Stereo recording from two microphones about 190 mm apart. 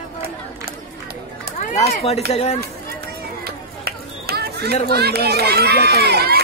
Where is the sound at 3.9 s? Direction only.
55° right (ahead or behind).